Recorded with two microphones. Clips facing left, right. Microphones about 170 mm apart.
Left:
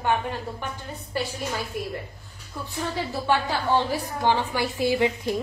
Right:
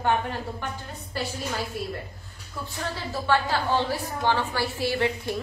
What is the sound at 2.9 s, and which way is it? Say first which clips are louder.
A woman's voice: even; 15° left (ahead or behind).